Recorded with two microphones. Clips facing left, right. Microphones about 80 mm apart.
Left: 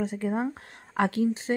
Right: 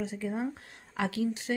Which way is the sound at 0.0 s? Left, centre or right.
Left.